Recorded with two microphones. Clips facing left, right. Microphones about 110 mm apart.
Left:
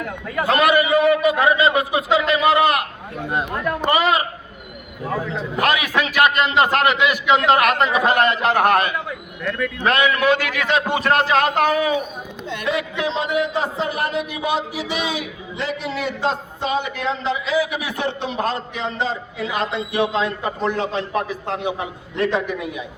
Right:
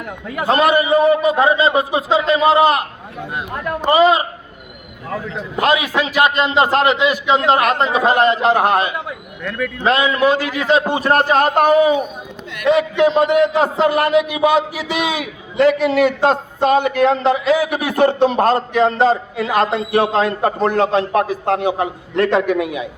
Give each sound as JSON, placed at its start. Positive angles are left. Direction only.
{"t": 0.4, "sound": "a man's voice", "side_deg": -30}
{"t": 5.5, "sound": "a man's voice", "side_deg": -25}
{"t": 9.4, "sound": "a man's voice", "side_deg": 0}
{"t": 9.8, "sound": "a man's voice", "side_deg": -25}
{"t": 11.1, "sound": "a man's voice", "side_deg": -45}
{"t": 11.6, "sound": "a man's voice", "side_deg": -20}
{"t": 13.0, "sound": "a man's voice", "side_deg": -55}
{"t": 15.5, "sound": "a man's voice", "side_deg": -60}
{"t": 22.1, "sound": "a man's voice", "side_deg": -50}